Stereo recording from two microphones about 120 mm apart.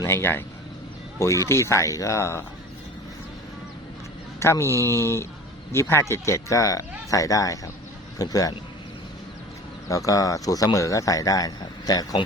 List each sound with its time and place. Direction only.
0.0 s a man's voice: 20° left (ahead or behind)
1.5 s a man's voice: 25° left (ahead or behind)
4.4 s a man's voice: 20° left (ahead or behind)
10.1 s a man's voice: 30° left (ahead or behind)